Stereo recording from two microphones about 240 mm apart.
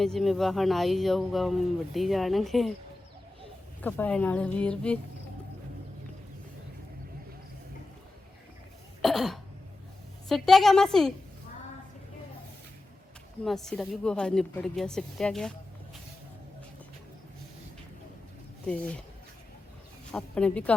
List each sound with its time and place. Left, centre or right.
0.0 s speech: centre
3.8 s speech: centre
9.0 s cough: centre
10.2 s speech: centre
13.4 s speech: centre
20.1 s speech: centre